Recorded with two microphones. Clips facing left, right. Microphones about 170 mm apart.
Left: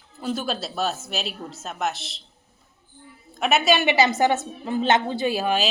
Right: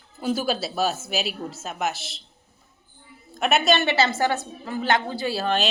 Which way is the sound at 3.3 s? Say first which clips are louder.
Even; centre (ahead or behind).